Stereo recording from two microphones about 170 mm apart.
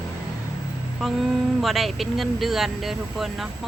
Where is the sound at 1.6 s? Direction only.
Centre (ahead or behind).